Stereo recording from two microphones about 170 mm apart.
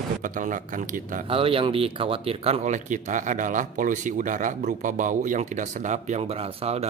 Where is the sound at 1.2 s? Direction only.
35° right (ahead or behind).